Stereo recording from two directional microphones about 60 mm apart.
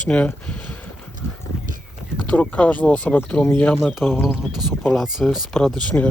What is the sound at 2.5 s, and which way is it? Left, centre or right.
Speech, left.